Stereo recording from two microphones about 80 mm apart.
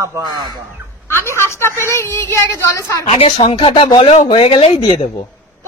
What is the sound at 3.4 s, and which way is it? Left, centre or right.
Speech, left.